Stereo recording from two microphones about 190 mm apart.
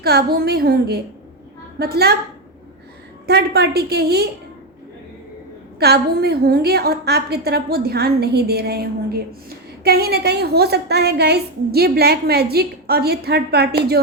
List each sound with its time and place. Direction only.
0.0 s a woman's voice: 55° right (ahead or behind)
3.2 s a woman's voice: 60° right (ahead or behind)
5.8 s a woman's voice: 55° right (ahead or behind)